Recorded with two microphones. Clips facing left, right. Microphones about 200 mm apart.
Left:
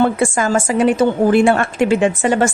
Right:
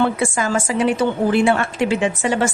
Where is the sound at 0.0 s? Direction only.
50° left (ahead or behind).